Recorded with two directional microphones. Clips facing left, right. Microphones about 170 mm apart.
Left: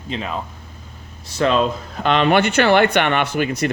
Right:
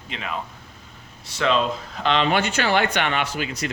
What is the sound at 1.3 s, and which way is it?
Speech, 45° left (ahead or behind).